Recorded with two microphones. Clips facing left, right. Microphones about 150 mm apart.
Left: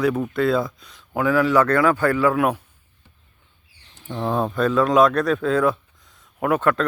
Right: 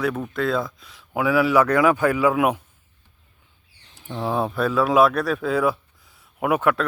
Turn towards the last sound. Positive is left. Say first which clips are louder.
# left 1 dB
turn(degrees=-10)  # may be behind; listen again after turning